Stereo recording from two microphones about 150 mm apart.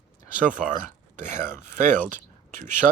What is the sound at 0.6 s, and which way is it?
Speech, centre (ahead or behind).